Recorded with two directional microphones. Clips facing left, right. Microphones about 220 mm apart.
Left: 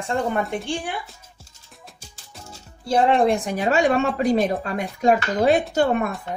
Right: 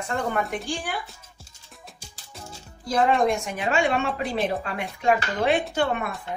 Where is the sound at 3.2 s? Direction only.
35° left (ahead or behind).